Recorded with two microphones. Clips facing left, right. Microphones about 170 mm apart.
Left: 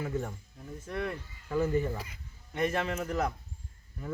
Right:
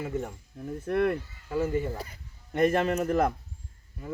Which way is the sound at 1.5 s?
10° right (ahead or behind).